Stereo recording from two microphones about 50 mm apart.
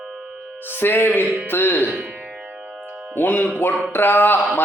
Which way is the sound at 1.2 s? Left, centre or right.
Right.